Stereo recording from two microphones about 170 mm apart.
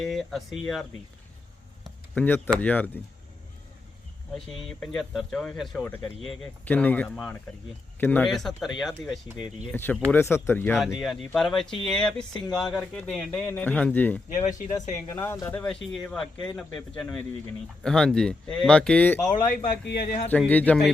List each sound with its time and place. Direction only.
0.0 s speech: centre (ahead or behind)
1.8 s a sound: 10° left (ahead or behind)
2.6 s speech: 10° left (ahead or behind)
4.5 s speech: centre (ahead or behind)
9.7 s speech: 10° left (ahead or behind)
10.8 s speech: centre (ahead or behind)
14.7 s speech: 20° left (ahead or behind)
19.5 s speech: 70° left (ahead or behind)
20.5 s speech: 10° left (ahead or behind)